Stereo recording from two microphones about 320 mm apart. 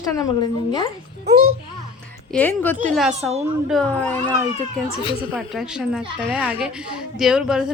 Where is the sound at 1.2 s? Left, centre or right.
Right.